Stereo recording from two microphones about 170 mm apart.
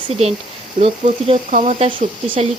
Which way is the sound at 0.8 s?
35° right (ahead or behind).